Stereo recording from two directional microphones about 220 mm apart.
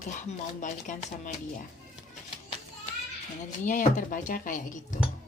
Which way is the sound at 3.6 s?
35° left (ahead or behind).